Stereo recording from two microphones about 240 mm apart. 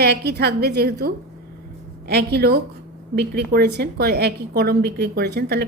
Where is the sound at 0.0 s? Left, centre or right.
Right.